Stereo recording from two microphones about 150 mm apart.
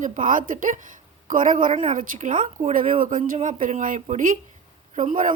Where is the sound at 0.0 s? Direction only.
60° right (ahead or behind).